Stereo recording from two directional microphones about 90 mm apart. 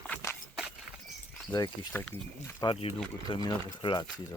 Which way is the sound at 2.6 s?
45° left (ahead or behind).